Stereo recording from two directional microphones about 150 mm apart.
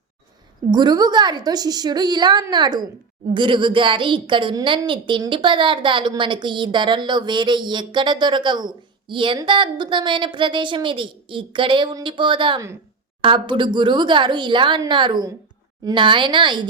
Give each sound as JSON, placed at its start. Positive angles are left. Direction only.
{"t": 0.7, "sound": "a woman's voice", "side_deg": -30}